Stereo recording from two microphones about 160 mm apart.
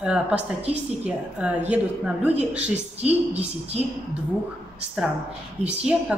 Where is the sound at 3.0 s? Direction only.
40° right (ahead or behind).